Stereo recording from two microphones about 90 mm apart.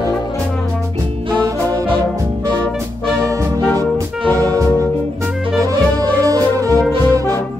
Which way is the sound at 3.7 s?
25° left (ahead or behind).